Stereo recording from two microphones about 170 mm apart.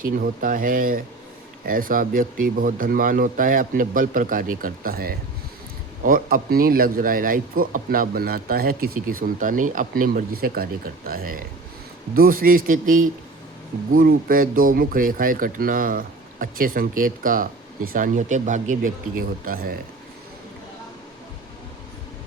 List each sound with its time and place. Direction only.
0.0 s speech: 55° right (ahead or behind)